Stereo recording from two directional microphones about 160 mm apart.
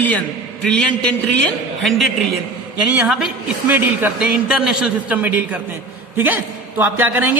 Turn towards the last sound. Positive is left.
turn(degrees=-10)  # may be behind; listen again after turning